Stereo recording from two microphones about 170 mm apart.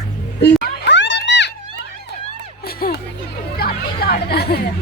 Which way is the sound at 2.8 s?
55° left (ahead or behind).